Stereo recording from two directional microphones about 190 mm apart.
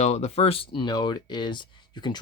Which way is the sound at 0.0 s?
35° left (ahead or behind).